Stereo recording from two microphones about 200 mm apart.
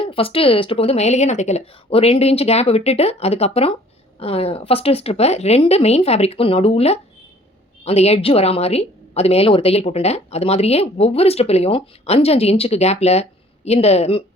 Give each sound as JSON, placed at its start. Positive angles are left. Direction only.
{"t": 0.0, "sound": "a woman's voice", "side_deg": 25}